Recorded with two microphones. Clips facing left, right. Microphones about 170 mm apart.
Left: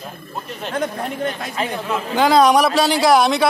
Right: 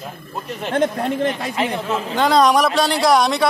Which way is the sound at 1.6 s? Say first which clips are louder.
Even; 25° right (ahead or behind).